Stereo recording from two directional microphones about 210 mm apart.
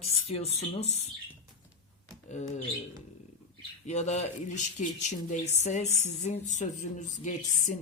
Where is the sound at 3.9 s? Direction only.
35° left (ahead or behind).